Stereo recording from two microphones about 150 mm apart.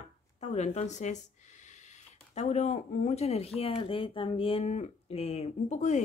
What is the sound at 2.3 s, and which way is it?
Speech, 50° left (ahead or behind).